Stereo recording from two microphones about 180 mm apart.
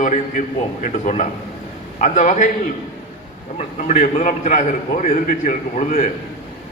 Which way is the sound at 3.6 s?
40° left (ahead or behind).